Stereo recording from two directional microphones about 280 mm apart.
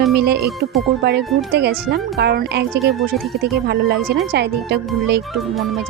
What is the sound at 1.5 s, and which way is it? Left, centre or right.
Speech, right.